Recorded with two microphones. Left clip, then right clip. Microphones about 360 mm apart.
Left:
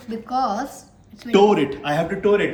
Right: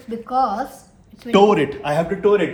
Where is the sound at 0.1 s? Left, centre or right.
Centre.